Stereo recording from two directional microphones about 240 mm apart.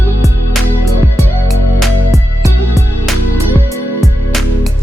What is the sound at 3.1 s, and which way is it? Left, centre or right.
Music, centre.